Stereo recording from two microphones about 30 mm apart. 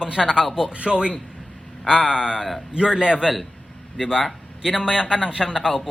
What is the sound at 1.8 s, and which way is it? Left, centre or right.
A man's voice, right.